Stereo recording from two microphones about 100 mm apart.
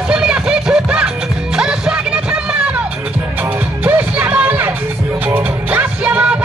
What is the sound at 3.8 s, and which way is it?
Music, 15° right (ahead or behind).